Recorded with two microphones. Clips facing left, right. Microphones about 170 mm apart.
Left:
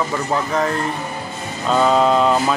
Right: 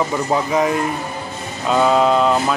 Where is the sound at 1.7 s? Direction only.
5° right (ahead or behind).